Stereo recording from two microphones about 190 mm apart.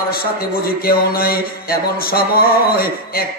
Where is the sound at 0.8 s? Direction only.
50° left (ahead or behind).